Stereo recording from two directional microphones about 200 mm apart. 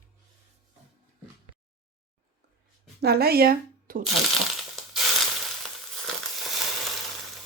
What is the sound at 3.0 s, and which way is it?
A woman's voice, 50° right (ahead or behind).